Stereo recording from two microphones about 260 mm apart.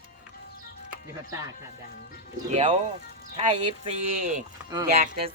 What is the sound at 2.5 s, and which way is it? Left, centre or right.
Speech, right.